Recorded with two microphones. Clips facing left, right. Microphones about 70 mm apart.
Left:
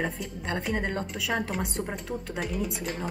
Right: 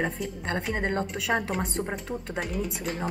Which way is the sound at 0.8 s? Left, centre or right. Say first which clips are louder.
Right 3 dB; right.